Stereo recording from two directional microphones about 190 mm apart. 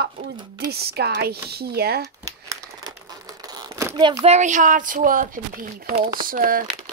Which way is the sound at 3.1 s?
20° right (ahead or behind).